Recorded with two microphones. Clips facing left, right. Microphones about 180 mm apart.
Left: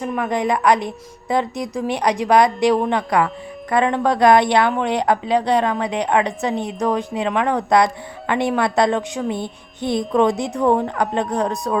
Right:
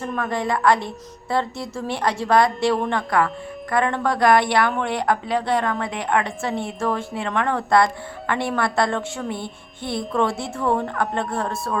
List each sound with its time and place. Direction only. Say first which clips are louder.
0.0 s a woman's voice: left 4 dB; 15° left (ahead or behind)